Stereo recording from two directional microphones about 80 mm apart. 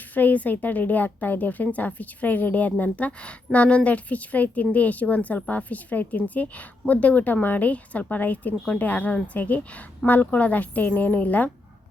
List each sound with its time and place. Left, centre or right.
0.1 s a woman's voice: left